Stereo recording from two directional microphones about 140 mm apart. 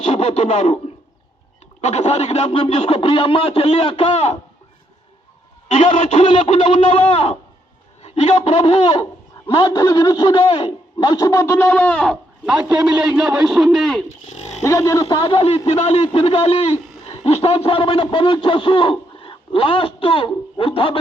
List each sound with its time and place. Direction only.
0.0 s speech: 50° left (ahead or behind)
1.8 s speech: 50° left (ahead or behind)
5.6 s speech: 55° left (ahead or behind)
9.6 s a man's voice: 25° left (ahead or behind); by 12.1 s 10° left (ahead or behind)
12.5 s a man's voice: 5° right (ahead or behind)
14.3 s speech: 55° left (ahead or behind)
14.6 s a man's voice: 25° left (ahead or behind)
15.0 s a man's voice: 35° left (ahead or behind)